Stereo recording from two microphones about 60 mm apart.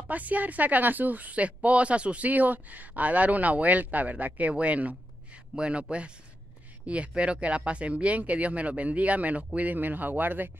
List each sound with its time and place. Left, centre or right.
0.1 s speech: right